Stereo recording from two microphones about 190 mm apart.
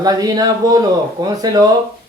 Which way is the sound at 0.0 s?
20° right (ahead or behind).